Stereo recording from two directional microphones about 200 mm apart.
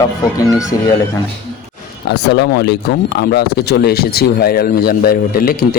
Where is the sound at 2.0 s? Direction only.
55° left (ahead or behind).